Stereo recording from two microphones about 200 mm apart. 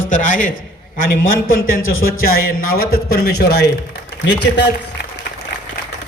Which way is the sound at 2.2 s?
50° left (ahead or behind).